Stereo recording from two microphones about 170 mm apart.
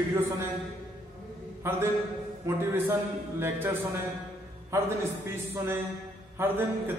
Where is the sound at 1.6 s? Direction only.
15° right (ahead or behind).